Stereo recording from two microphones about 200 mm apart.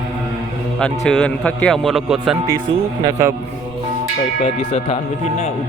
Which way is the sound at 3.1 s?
15° right (ahead or behind).